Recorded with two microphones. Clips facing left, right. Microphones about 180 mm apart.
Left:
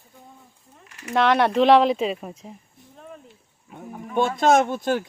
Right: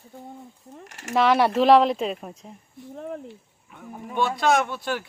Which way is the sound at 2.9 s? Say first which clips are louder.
Right 9 dB; 70° right (ahead or behind).